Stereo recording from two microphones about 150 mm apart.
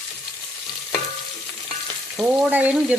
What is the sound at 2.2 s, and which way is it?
Frying, 10° right (ahead or behind).